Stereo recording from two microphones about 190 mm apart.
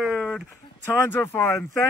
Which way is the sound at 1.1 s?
10° left (ahead or behind).